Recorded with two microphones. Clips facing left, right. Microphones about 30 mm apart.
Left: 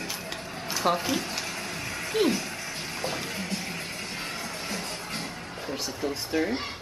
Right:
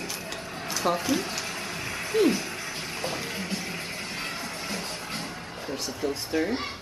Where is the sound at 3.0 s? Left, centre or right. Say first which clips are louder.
Even; centre.